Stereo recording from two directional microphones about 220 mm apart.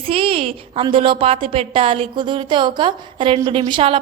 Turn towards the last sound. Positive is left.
turn(degrees=-25)  # may be behind; listen again after turning